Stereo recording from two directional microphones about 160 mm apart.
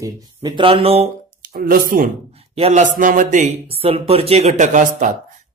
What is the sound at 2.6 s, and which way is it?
Speech, 50° right (ahead or behind).